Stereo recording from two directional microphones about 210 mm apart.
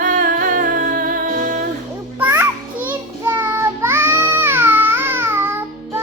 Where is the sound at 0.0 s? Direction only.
35° right (ahead or behind).